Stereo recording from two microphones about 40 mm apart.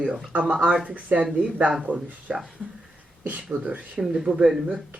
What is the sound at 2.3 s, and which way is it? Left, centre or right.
Speech, centre.